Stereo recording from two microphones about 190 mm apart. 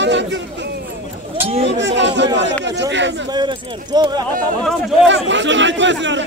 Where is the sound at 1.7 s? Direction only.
70° right (ahead or behind).